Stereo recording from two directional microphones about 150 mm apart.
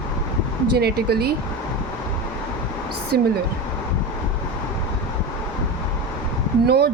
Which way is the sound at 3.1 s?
90° right.